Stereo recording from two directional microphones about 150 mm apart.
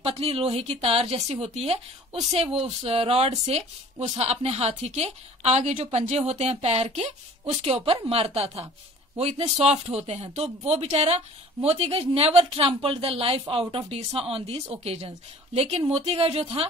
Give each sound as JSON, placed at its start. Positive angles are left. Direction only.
{"t": 0.0, "sound": "speech", "side_deg": -40}